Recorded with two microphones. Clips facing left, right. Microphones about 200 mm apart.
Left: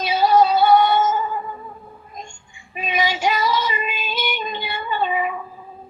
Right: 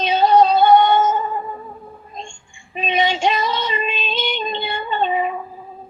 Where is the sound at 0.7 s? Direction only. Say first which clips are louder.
Right 2 dB; 30° right (ahead or behind).